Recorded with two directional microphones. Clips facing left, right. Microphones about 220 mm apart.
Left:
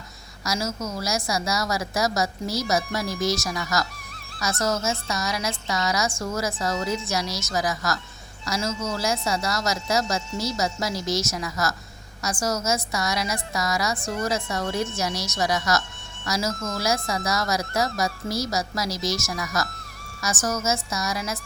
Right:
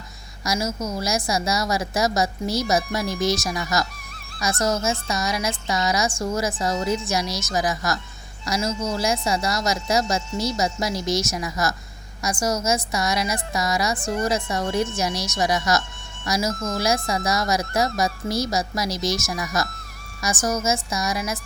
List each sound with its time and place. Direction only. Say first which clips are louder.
0.4 s a woman's voice: right 3 dB; 15° right (ahead or behind)
16.5 s speech: right 3 dB; 30° right (ahead or behind)
16.8 s a woman's voice: right 2 dB; 20° right (ahead or behind)